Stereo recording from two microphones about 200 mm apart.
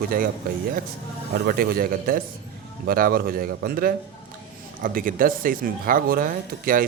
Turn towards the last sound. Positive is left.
turn(degrees=-45)  # may be behind; listen again after turning